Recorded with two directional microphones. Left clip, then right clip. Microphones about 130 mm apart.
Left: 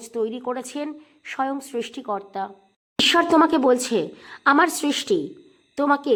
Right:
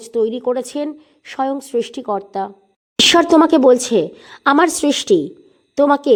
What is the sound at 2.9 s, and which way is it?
Speech, 55° right (ahead or behind).